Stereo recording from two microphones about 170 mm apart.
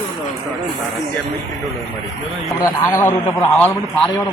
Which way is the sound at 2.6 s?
15° left (ahead or behind).